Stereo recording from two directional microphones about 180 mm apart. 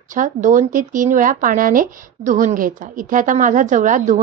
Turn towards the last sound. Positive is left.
turn(degrees=-45)  # may be behind; listen again after turning